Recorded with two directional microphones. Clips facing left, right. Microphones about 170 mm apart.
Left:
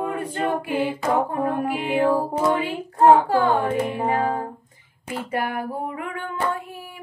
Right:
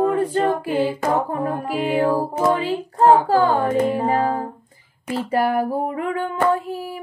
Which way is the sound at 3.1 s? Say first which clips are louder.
Right 1 dB; 30° right (ahead or behind).